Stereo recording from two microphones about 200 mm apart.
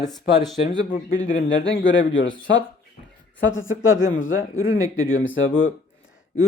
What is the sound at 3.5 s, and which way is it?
Speech, 75° left (ahead or behind).